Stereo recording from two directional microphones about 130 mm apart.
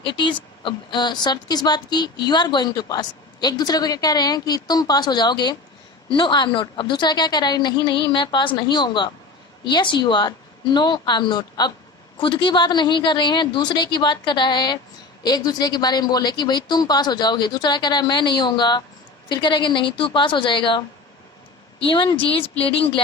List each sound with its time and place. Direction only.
0.0 s speech: 40° left (ahead or behind)
21.8 s speech: 40° left (ahead or behind)